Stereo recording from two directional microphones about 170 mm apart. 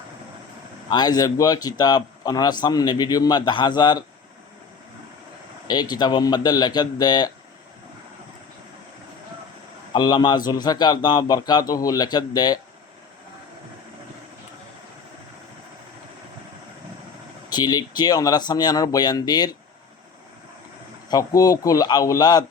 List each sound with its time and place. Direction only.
0.9 s a man's voice: 25° left (ahead or behind)
5.6 s a man's voice: 25° left (ahead or behind)
9.9 s a man's voice: 25° left (ahead or behind)
17.5 s a man's voice: 25° left (ahead or behind)
21.1 s a man's voice: 20° left (ahead or behind)